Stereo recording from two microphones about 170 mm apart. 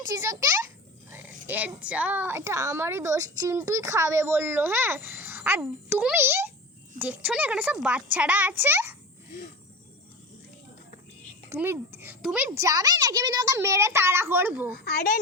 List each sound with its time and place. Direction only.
0.0 s a child's voice: 20° right (ahead or behind)
11.4 s a child's voice: 15° right (ahead or behind)
12.5 s a woman's voice: 20° right (ahead or behind)